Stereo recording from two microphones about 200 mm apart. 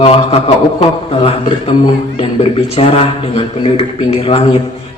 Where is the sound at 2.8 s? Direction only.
30° left (ahead or behind).